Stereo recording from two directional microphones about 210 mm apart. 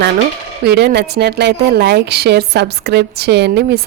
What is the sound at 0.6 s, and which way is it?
A woman's voice, 50° right (ahead or behind).